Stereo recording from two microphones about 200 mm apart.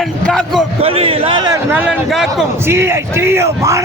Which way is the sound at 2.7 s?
15° right (ahead or behind).